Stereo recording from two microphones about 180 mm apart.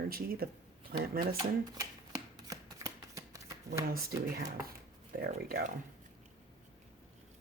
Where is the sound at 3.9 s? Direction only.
55° right (ahead or behind).